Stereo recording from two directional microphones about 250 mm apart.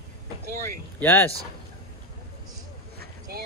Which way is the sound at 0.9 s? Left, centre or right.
Centre.